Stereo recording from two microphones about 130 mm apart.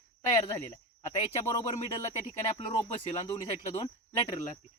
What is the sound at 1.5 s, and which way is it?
Speech, 25° left (ahead or behind).